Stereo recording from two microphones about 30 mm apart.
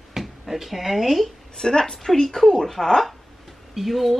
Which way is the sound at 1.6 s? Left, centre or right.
Left.